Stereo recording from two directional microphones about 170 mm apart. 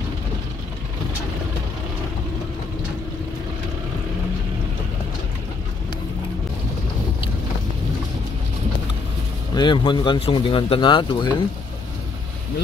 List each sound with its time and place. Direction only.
9.6 s speech: 30° left (ahead or behind)